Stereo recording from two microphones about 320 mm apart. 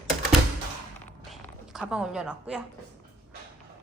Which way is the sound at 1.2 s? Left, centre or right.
Centre.